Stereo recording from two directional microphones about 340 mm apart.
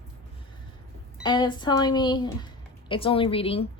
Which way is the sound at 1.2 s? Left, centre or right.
Centre.